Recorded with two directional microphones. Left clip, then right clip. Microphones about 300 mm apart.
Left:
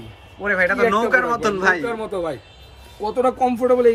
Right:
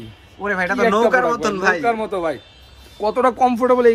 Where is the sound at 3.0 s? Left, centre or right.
Centre.